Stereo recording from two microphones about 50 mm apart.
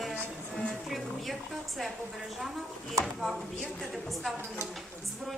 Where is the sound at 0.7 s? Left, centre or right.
Centre.